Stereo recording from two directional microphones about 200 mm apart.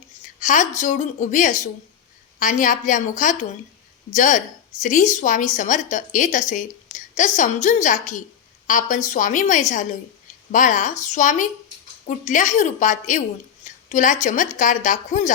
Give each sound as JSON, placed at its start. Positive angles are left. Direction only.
{"t": 0.3, "sound": "a woman's voice", "side_deg": 40}